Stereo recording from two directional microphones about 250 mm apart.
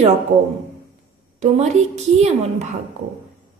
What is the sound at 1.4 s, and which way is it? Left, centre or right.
Speech, right.